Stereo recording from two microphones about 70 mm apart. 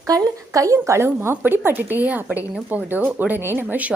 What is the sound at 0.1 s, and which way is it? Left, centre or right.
Speech, right.